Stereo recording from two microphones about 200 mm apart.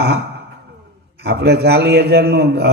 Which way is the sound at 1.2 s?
55° right (ahead or behind).